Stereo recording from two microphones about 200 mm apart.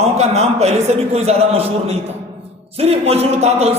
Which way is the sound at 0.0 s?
35° right (ahead or behind).